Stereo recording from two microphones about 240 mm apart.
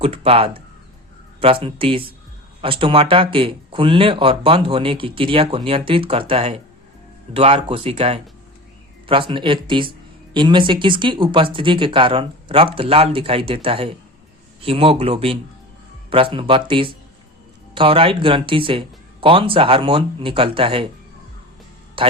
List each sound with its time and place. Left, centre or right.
0.0 s speech: right
22.0 s a man's voice: right